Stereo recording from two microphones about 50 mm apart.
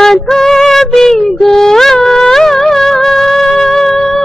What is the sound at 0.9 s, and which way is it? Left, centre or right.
Music, centre.